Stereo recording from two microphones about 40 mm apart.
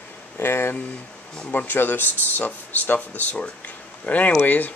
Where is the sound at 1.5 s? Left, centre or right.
Left.